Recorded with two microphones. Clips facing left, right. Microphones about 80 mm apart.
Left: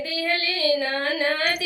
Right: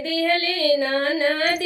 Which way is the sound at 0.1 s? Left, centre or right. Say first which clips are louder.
Right 7 dB; right.